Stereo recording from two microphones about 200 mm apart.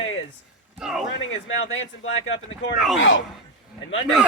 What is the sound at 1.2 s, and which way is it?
Speech, 75° left (ahead or behind).